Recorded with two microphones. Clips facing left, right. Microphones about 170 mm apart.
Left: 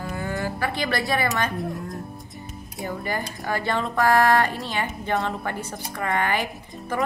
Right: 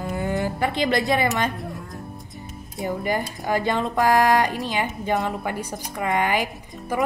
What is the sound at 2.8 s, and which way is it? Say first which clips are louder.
Speech: right 4 dB; 15° right (ahead or behind).